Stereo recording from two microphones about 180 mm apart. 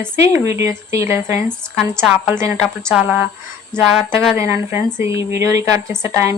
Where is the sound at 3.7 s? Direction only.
5° left (ahead or behind).